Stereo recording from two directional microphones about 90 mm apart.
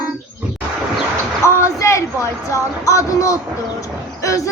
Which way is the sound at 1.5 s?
30° left (ahead or behind).